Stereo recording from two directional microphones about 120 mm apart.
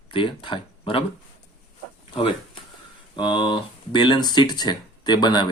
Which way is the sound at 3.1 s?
40° left (ahead or behind).